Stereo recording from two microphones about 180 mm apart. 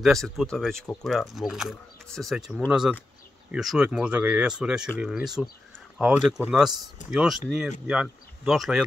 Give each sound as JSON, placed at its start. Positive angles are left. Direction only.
{"t": 0.0, "sound": "speech", "side_deg": 0}